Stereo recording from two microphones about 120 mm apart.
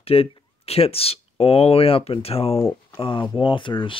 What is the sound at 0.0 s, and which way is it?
Speech, 55° left (ahead or behind).